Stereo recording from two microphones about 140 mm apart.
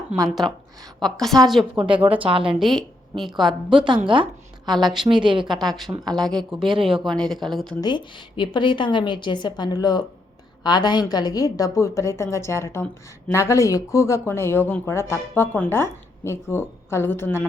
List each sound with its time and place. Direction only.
0.9 s speech: 5° left (ahead or behind)
1.7 s speech: 40° right (ahead or behind)
2.6 s a woman's voice: centre (ahead or behind)
4.6 s speech: centre (ahead or behind)
5.0 s speech: 35° right (ahead or behind)
5.6 s speech: centre (ahead or behind)
6.7 s speech: 40° right (ahead or behind)
7.0 s speech: centre (ahead or behind)
7.8 s a woman's voice: 30° left (ahead or behind); by 17.4 s 15° left (ahead or behind)